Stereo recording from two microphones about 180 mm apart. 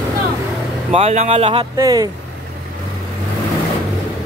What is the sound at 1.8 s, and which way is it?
Speech, 20° right (ahead or behind).